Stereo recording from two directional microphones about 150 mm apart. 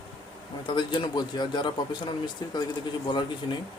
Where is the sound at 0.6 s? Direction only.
30° left (ahead or behind).